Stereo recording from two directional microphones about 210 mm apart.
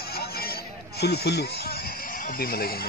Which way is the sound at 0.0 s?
45° left (ahead or behind).